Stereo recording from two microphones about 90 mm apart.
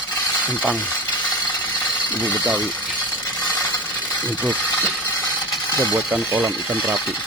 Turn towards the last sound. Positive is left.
turn(degrees=-20)  # may be behind; listen again after turning